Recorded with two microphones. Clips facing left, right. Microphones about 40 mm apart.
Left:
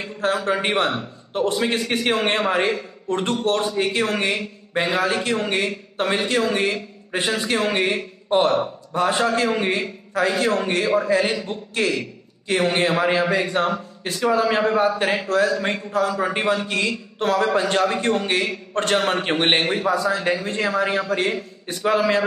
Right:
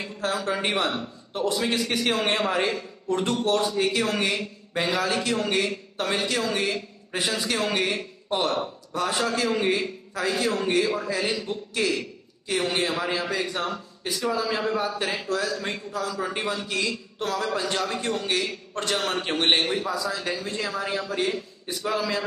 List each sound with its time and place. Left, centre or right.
0.2 s a man's voice: left